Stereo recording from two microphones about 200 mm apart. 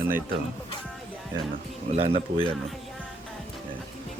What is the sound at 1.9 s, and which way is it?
Speech, 30° right (ahead or behind).